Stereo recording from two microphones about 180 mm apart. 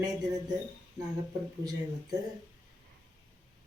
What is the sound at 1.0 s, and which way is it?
Speech, 20° right (ahead or behind).